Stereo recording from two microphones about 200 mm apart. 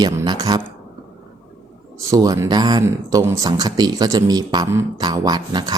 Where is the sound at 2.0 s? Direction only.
15° right (ahead or behind).